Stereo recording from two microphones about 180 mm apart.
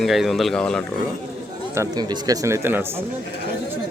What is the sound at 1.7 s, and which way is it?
Speech, 20° right (ahead or behind).